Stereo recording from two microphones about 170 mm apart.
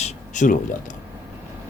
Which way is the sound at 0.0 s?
50° left (ahead or behind).